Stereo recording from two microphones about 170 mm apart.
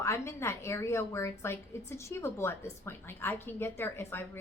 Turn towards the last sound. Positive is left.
turn(degrees=15)  # may be behind; listen again after turning